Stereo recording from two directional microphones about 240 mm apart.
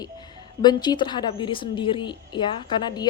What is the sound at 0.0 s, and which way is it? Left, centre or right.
A woman's voice, centre.